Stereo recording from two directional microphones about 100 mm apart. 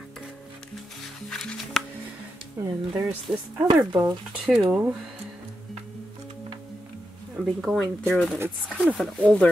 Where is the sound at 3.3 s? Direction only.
10° right (ahead or behind).